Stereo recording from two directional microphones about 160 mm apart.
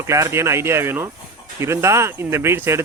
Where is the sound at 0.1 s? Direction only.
15° right (ahead or behind).